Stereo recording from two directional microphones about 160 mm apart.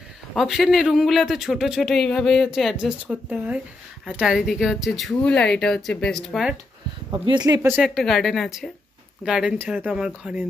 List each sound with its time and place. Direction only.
0.3 s speech: centre (ahead or behind)
7.1 s speech: 25° right (ahead or behind)
7.7 s speech: centre (ahead or behind)